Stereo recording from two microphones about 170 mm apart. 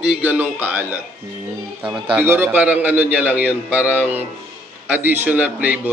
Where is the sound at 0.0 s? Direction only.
10° right (ahead or behind).